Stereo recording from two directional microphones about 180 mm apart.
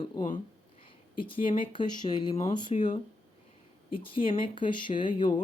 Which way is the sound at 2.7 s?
35° left (ahead or behind).